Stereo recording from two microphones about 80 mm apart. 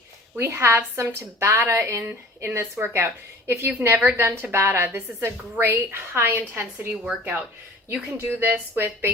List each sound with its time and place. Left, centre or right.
0.3 s a woman's voice: right